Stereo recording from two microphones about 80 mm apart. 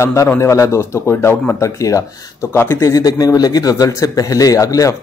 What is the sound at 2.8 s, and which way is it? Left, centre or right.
A man's voice, left.